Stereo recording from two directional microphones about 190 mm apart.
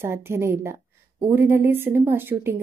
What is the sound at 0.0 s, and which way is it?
A woman's voice, 15° right (ahead or behind).